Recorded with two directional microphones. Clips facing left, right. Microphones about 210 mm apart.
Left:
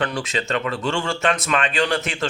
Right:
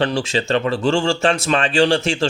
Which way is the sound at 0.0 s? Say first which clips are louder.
Right 5 dB; 30° right (ahead or behind).